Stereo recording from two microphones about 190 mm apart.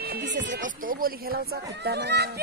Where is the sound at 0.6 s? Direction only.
45° right (ahead or behind).